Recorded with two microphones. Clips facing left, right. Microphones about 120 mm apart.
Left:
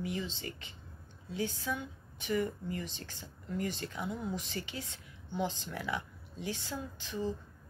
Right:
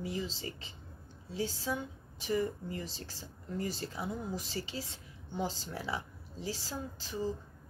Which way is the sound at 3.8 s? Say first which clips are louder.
Even; 30° right (ahead or behind).